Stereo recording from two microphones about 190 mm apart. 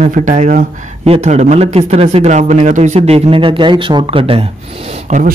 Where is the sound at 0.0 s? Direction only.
40° right (ahead or behind).